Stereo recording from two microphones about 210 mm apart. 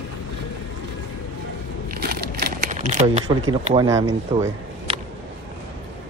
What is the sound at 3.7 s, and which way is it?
Speech, 15° right (ahead or behind).